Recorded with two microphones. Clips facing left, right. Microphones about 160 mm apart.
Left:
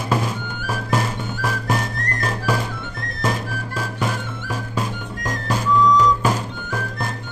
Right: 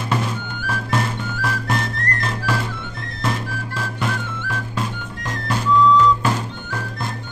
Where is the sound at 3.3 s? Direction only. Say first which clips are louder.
Even; 10° left (ahead or behind).